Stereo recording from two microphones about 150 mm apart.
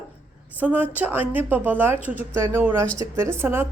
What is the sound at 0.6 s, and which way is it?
A woman's voice, 10° right (ahead or behind).